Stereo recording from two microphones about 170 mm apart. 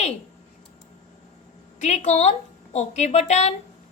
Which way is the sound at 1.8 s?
40° left (ahead or behind).